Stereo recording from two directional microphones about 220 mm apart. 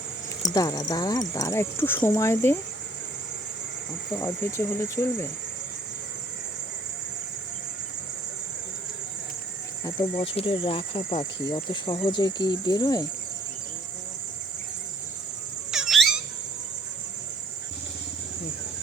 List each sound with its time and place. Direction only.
0.4 s speech: 15° left (ahead or behind)
4.2 s speech: 10° left (ahead or behind)
9.8 s speech: 25° left (ahead or behind)
15.7 s squeak: centre (ahead or behind)